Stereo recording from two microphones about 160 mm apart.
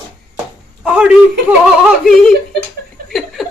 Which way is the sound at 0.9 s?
5° right (ahead or behind).